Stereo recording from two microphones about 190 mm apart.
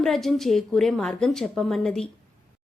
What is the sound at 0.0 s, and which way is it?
A woman's voice, centre (ahead or behind).